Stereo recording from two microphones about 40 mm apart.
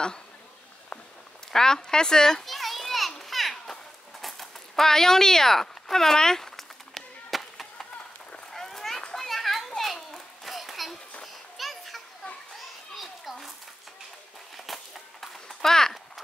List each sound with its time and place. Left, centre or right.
1.5 s speech: centre
2.4 s children playing: centre
4.2 s a sound: centre
8.5 s run: centre
9.1 s children playing: centre
14.7 s a sound: centre